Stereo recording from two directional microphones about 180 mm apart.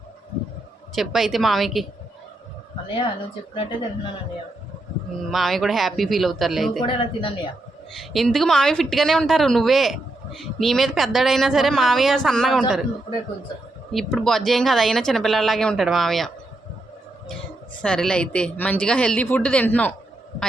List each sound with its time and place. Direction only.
0.9 s a woman's voice: centre (ahead or behind)
3.5 s a woman's voice: 30° left (ahead or behind)
5.3 s a woman's voice: centre (ahead or behind)
6.8 s a woman's voice: 30° left (ahead or behind)
7.9 s a woman's voice: centre (ahead or behind)
13.9 s a woman's voice: centre (ahead or behind)
17.8 s speech: 5° left (ahead or behind)